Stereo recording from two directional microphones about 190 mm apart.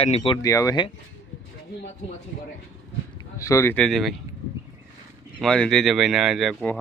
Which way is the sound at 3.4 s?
15° left (ahead or behind).